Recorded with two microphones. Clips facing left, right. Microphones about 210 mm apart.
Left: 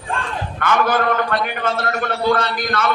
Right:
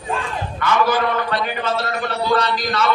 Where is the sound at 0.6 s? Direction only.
55° left (ahead or behind).